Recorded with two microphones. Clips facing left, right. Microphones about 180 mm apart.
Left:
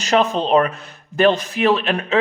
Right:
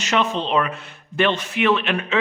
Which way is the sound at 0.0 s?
35° left (ahead or behind).